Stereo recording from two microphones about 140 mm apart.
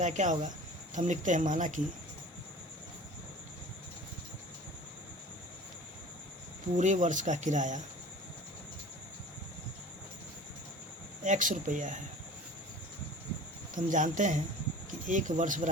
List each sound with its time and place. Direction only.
0.0 s speech: 60° right (ahead or behind)
6.7 s speech: 60° right (ahead or behind)
11.2 s speech: 65° right (ahead or behind)
13.7 s speech: 65° right (ahead or behind)